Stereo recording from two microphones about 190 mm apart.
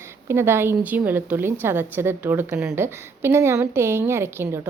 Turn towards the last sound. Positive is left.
turn(degrees=-15)  # may be behind; listen again after turning